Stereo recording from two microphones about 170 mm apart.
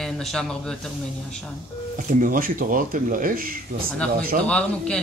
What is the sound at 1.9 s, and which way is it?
Speech, 55° right (ahead or behind).